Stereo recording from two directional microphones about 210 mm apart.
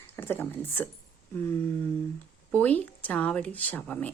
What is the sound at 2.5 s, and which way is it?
Speech, 5° left (ahead or behind).